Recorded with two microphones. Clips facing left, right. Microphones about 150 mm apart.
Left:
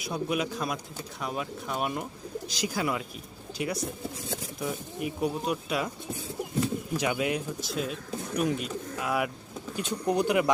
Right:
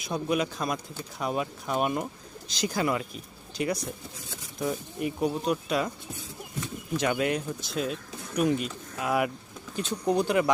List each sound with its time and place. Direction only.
0.0 s speech: 5° left (ahead or behind)
6.9 s speech: 10° left (ahead or behind)
9.7 s speech: 10° left (ahead or behind)